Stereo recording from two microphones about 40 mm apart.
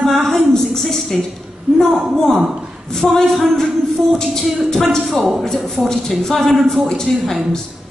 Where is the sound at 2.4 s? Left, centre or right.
Centre.